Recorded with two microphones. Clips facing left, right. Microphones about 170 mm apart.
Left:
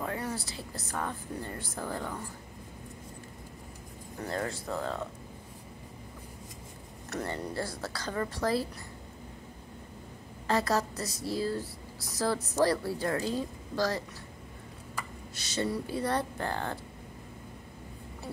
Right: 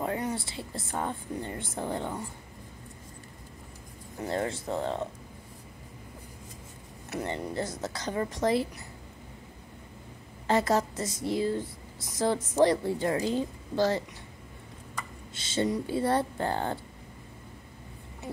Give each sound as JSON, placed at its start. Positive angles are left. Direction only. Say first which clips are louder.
{"t": 0.0, "sound": "a sound", "louder": "right 4 dB", "side_deg": -25}
{"t": 0.7, "sound": "speech", "louder": "right 3 dB", "side_deg": -25}
{"t": 4.2, "sound": "speech", "louder": "right 3 dB", "side_deg": -25}
{"t": 7.2, "sound": "speech", "louder": "right 3 dB", "side_deg": -15}
{"t": 10.4, "sound": "speech", "louder": "right 3 dB", "side_deg": -25}
{"t": 15.3, "sound": "speech", "louder": "right 4 dB", "side_deg": -25}